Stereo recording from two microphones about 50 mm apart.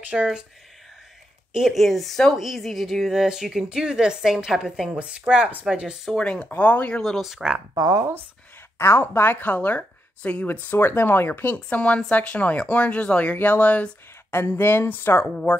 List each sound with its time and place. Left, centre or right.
0.1 s speech: centre
1.5 s speech: centre
1.8 s a woman's voice: centre
4.9 s a woman's voice: right
6.1 s speech: centre
6.9 s speech: centre
7.2 s speech: centre
7.9 s speech: right
8.7 s speech: left
9.4 s speech: left
11.5 s speech: left
13.4 s speech: left
14.3 s speech: left